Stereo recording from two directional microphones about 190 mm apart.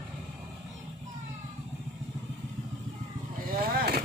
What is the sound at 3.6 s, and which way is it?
Vehicle, 50° right (ahead or behind).